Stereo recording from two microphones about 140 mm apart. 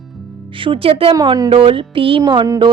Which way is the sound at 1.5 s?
40° right (ahead or behind).